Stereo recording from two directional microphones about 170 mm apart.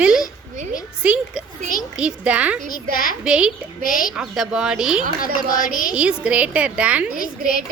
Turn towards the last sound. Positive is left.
turn(degrees=55)  # may be behind; listen again after turning